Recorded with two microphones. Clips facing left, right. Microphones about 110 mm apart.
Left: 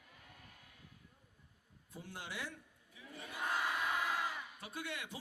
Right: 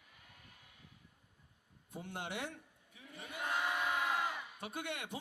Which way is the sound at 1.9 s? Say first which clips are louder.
Right 5 dB; 60° right (ahead or behind).